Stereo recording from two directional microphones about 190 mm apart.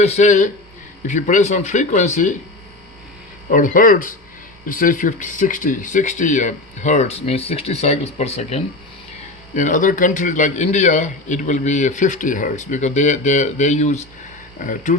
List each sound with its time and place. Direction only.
0.0 s a man's voice: 35° left (ahead or behind)
3.5 s a man's voice: 45° left (ahead or behind)